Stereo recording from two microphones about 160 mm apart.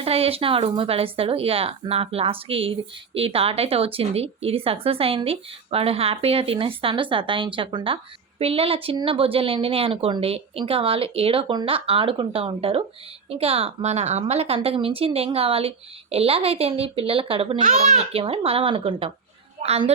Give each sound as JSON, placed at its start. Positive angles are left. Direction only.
{"t": 0.0, "sound": "speech", "side_deg": -35}
{"t": 17.6, "sound": "speech", "side_deg": -45}